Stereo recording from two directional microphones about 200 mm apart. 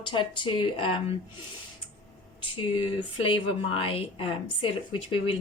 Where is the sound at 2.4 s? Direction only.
25° left (ahead or behind).